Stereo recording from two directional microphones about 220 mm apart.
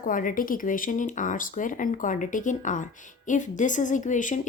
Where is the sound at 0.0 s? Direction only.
40° left (ahead or behind).